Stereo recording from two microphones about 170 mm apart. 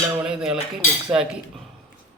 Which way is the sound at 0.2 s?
5° right (ahead or behind).